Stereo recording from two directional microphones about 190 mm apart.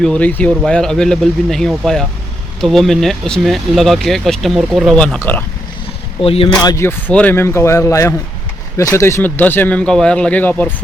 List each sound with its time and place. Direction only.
0.0 s speech: 5° left (ahead or behind)
6.2 s speech: 30° left (ahead or behind)
6.6 s speech: 20° left (ahead or behind)